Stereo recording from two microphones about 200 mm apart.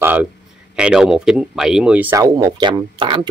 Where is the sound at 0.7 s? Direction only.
5° right (ahead or behind).